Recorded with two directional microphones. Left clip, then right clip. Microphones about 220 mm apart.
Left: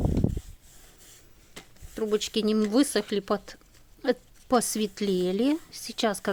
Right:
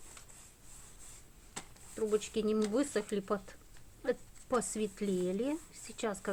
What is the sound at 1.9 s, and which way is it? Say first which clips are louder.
Speech: left 6 dB; 50° left (ahead or behind).